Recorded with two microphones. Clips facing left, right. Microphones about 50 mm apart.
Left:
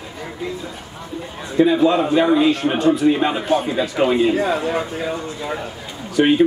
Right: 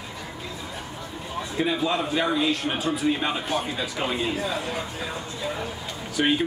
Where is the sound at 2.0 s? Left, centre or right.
Left.